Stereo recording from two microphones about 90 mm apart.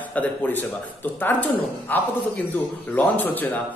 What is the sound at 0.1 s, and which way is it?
A man's voice, 15° left (ahead or behind).